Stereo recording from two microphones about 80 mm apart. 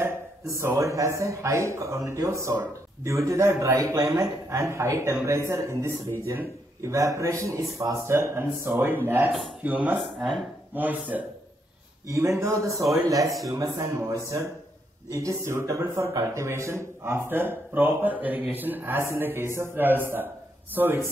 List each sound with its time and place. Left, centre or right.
0.0 s a man's voice: right
12.1 s a man's voice: right